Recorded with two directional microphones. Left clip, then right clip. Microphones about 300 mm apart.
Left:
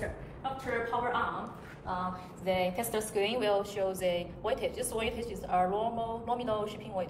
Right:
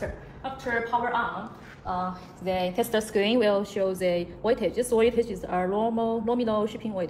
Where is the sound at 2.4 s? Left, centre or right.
Right.